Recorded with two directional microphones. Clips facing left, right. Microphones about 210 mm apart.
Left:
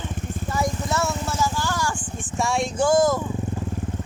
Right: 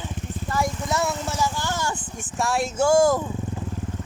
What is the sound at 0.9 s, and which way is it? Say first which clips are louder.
Vehicle: even; 15° right (ahead or behind).